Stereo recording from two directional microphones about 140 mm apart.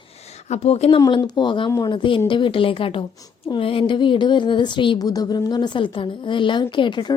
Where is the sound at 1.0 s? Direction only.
30° left (ahead or behind).